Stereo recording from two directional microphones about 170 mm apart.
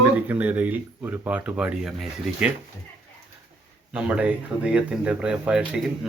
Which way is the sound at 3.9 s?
5° right (ahead or behind).